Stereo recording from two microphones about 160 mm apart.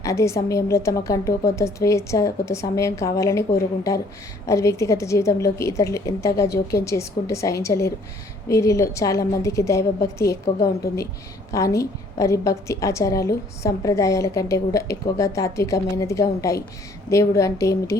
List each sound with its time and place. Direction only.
0.0 s a woman's voice: 20° left (ahead or behind)
11.5 s a woman's voice: 20° left (ahead or behind)